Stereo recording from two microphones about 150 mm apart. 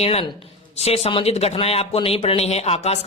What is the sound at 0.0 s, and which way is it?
A man's voice, 40° left (ahead or behind).